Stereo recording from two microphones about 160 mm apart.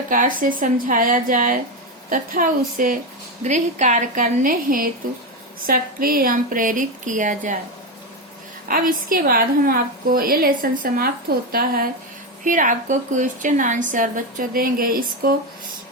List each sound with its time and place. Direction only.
0.1 s a woman's voice: 60° right (ahead or behind)
3.4 s a woman's voice: 50° right (ahead or behind)
8.6 s a woman's voice: 60° right (ahead or behind)
12.5 s a woman's voice: 55° right (ahead or behind)